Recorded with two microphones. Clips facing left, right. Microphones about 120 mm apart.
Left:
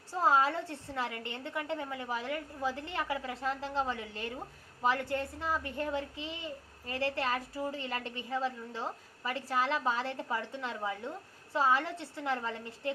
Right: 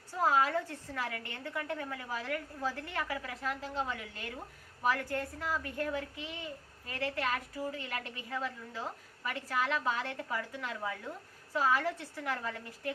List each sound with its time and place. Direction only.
0.1 s a woman's voice: 30° left (ahead or behind)